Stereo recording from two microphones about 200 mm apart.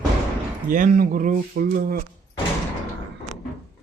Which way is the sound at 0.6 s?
45° right (ahead or behind).